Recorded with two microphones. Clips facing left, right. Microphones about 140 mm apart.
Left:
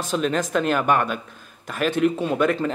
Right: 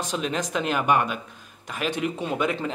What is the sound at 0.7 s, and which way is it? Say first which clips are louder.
Speech: even; 10° right (ahead or behind).